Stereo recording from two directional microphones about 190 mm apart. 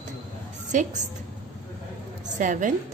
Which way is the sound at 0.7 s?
40° right (ahead or behind).